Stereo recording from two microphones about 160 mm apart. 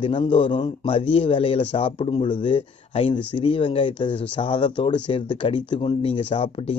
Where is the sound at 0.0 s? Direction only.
30° left (ahead or behind).